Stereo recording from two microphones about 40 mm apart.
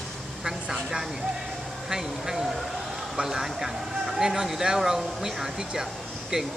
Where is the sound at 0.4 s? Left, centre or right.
Centre.